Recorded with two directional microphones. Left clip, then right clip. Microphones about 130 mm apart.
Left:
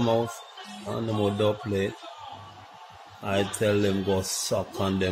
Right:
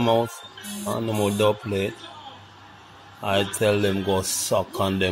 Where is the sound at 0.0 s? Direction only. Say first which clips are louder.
Right 4 dB; 10° right (ahead or behind).